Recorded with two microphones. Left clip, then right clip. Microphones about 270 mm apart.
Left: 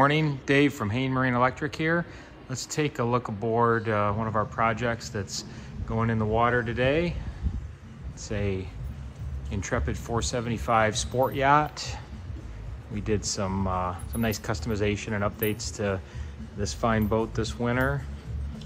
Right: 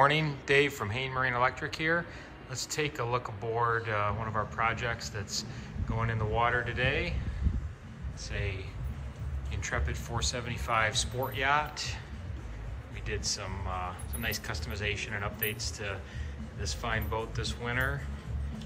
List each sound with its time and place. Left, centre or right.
0.0 s a man's voice: centre
8.2 s a man's voice: centre